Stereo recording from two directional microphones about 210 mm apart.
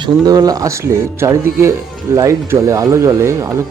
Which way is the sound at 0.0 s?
20° right (ahead or behind).